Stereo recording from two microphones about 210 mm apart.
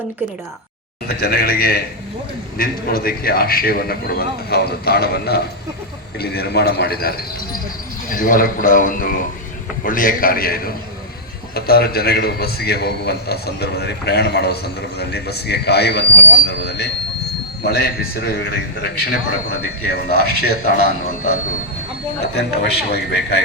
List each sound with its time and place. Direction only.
1.0 s a man's voice: 50° left (ahead or behind)
8.1 s a man's voice: 40° left (ahead or behind)
22.4 s a man's voice: 55° left (ahead or behind)